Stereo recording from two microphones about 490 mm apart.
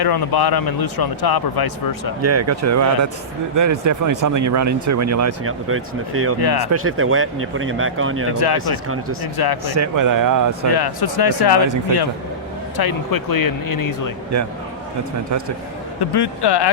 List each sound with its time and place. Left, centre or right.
0.0 s a man's voice: left
2.2 s speech: right
6.4 s a man's voice: left
6.7 s speech: right
8.3 s a man's voice: left
9.7 s speech: right
10.7 s a man's voice: left
12.7 s speech: left
16.0 s a man's voice: left